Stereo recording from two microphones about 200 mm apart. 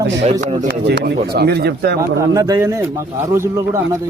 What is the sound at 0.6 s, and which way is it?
Speech, 55° right (ahead or behind).